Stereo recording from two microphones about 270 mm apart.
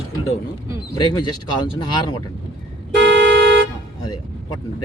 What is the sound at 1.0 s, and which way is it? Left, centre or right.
Speech, centre.